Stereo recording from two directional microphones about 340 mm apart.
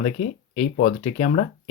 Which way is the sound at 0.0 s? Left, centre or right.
Centre.